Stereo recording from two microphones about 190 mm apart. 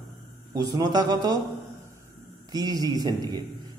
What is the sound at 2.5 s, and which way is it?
Speech, 20° right (ahead or behind).